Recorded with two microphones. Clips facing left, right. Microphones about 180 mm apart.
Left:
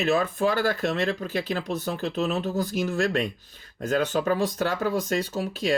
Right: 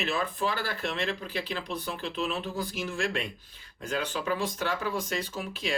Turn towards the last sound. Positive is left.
turn(degrees=40)  # may be behind; listen again after turning